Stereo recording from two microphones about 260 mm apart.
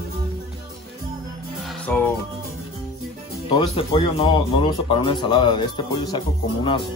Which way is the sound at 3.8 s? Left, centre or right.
Centre.